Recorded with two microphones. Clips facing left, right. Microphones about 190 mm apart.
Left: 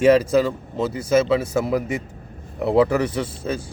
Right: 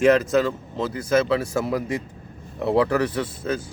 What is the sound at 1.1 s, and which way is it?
Speech, 5° left (ahead or behind).